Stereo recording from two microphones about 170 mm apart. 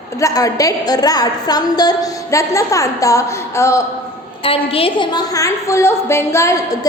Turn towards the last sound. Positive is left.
turn(degrees=15)  # may be behind; listen again after turning